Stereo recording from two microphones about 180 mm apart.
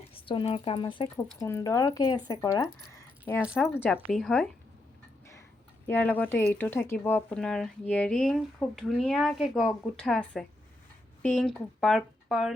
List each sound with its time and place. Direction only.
0.1 s speech: 30° left (ahead or behind)
3.4 s speech: 5° right (ahead or behind)
5.9 s speech: 10° left (ahead or behind)